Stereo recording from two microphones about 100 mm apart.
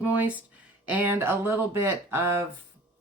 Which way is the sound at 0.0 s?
15° right (ahead or behind).